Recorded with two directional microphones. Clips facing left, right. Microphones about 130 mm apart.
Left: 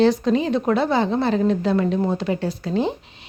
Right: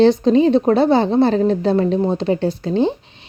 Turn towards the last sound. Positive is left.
turn(degrees=-30)  # may be behind; listen again after turning